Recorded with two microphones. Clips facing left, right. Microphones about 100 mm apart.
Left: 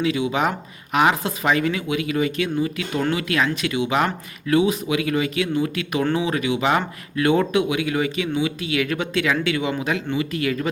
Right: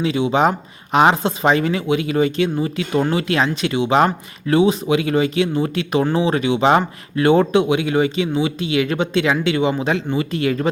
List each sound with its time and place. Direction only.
0.0 s speech: 30° right (ahead or behind)